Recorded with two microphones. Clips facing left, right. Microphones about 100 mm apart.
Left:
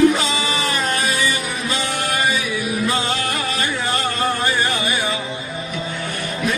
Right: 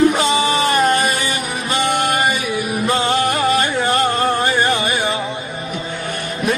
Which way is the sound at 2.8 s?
35° right (ahead or behind).